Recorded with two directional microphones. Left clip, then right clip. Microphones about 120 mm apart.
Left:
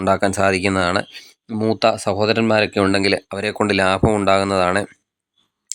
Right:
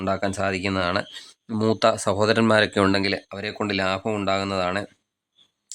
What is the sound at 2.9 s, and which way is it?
Speech, 40° left (ahead or behind).